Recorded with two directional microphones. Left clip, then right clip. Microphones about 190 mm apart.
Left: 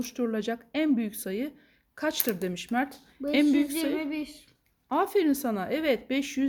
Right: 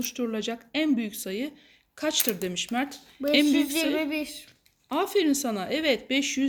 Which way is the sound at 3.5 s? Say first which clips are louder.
Right 2 dB; 40° right (ahead or behind).